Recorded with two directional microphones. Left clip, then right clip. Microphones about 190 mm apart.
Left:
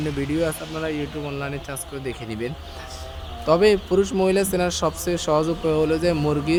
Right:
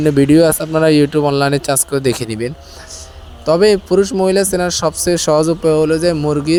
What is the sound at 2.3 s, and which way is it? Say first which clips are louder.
Speech: right 8 dB; 25° right (ahead or behind).